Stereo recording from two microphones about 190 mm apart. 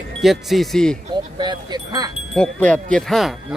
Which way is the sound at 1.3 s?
25° right (ahead or behind).